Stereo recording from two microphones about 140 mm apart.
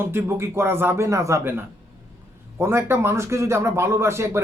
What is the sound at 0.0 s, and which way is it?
Speech, 15° right (ahead or behind).